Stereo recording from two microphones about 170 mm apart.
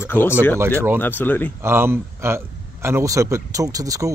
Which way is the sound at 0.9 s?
10° left (ahead or behind).